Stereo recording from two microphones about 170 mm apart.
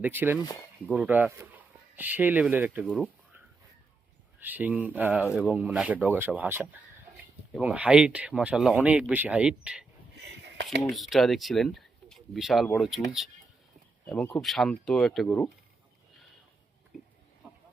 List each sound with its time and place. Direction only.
0.0 s speech: 10° right (ahead or behind)
2.8 s speech: 5° left (ahead or behind)
4.4 s speech: 10° right (ahead or behind)
10.2 s a sound: 90° right
10.9 s speech: centre (ahead or behind)
14.4 s speech: centre (ahead or behind)